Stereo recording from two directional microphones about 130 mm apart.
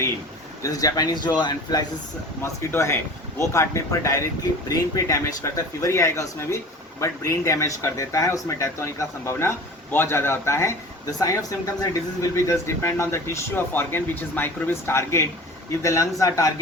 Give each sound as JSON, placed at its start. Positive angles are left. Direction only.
{"t": 0.6, "sound": "speech", "side_deg": 30}
{"t": 2.4, "sound": "speech", "side_deg": 20}